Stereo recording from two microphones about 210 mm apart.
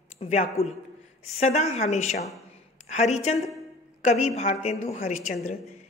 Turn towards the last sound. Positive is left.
turn(degrees=30)  # may be behind; listen again after turning